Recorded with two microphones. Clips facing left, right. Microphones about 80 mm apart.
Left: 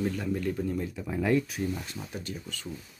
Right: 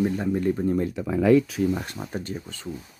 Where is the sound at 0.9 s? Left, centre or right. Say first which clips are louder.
Right 8 dB; right.